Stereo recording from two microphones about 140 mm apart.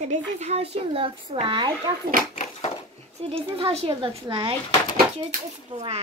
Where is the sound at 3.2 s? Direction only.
45° right (ahead or behind).